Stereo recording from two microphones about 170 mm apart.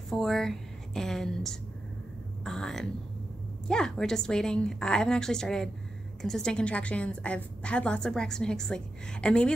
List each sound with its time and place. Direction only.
0.1 s a woman's voice: centre (ahead or behind)